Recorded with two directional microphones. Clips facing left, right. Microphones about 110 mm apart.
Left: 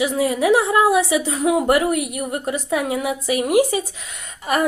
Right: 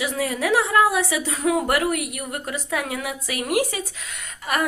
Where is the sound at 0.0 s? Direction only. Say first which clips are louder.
Left 6 dB; 20° left (ahead or behind).